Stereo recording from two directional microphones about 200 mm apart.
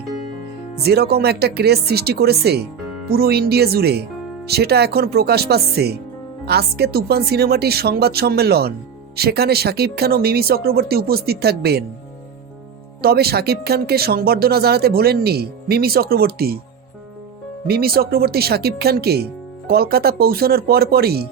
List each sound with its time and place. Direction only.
0.9 s speech: 55° right (ahead or behind)
13.0 s speech: 50° right (ahead or behind)
17.7 s speech: 50° right (ahead or behind)